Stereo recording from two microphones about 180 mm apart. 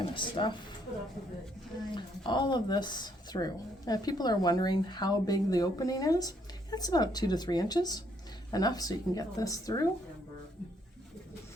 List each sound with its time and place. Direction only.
0.0 s speech: 25° left (ahead or behind)
2.0 s a woman's voice: 25° left (ahead or behind)